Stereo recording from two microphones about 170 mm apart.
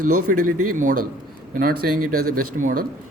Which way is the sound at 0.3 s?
50° right (ahead or behind).